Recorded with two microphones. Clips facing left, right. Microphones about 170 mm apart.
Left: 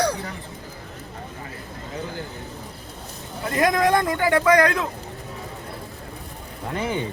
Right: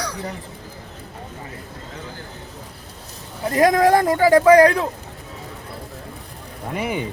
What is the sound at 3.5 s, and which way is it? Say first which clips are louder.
Speech: right 4 dB; 40° right (ahead or behind).